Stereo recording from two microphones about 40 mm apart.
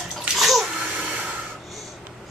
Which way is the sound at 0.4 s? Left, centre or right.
Centre.